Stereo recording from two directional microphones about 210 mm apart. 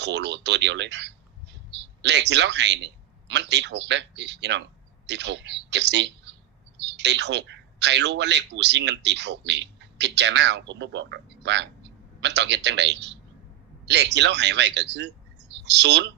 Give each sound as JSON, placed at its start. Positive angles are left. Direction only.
{"t": 0.0, "sound": "a man's voice", "side_deg": -55}